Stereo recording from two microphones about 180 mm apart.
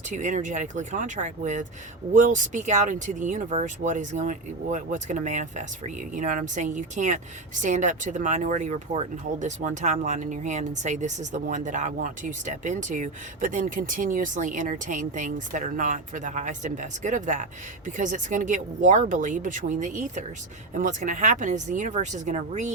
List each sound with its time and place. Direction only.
0.1 s speech: 45° right (ahead or behind)